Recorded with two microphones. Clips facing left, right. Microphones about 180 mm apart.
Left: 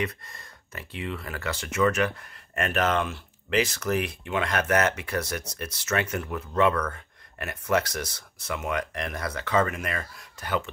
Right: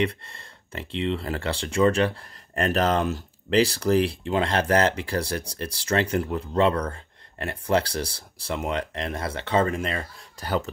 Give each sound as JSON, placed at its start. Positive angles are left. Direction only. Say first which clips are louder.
{"t": 0.0, "sound": "speech", "louder": "right 5 dB", "side_deg": -30}